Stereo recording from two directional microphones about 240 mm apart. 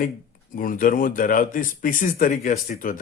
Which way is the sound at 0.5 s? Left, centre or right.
Left.